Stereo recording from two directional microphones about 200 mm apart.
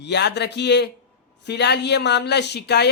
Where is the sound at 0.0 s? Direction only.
55° left (ahead or behind).